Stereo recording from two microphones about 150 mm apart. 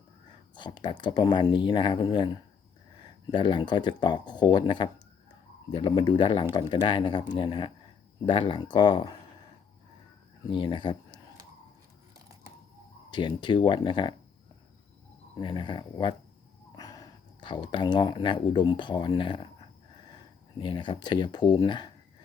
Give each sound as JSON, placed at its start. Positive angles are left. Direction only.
{"t": 0.5, "sound": "speech", "side_deg": 30}
{"t": 10.5, "sound": "speech", "side_deg": 30}
{"t": 13.1, "sound": "speech", "side_deg": 30}
{"t": 15.4, "sound": "speech", "side_deg": 30}
{"t": 20.6, "sound": "speech", "side_deg": 30}